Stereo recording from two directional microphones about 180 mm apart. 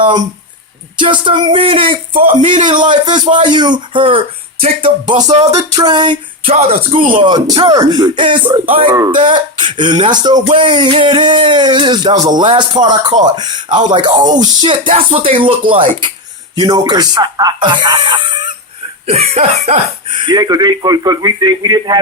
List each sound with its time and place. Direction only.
0.9 s speech: 25° right (ahead or behind)
19.0 s speech: 35° right (ahead or behind)
20.2 s speech: 25° right (ahead or behind)